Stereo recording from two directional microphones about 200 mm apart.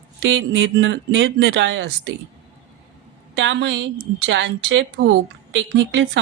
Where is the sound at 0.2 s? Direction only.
65° right (ahead or behind).